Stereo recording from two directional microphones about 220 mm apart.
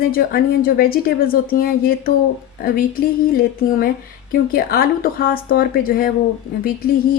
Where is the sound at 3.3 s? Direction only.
40° left (ahead or behind).